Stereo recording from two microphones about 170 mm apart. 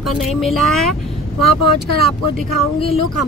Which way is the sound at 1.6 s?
70° right (ahead or behind).